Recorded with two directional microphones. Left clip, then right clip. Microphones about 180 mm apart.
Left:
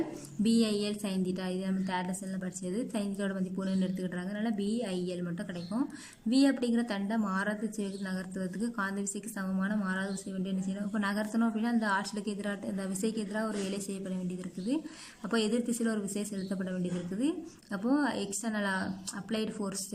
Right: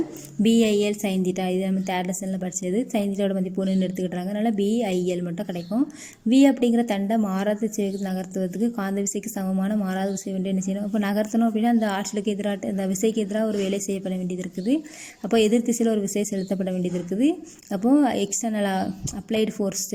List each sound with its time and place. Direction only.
0.4 s a woman's voice: 15° right (ahead or behind)
6.3 s a woman's voice: 15° right (ahead or behind)
15.3 s a woman's voice: 20° right (ahead or behind)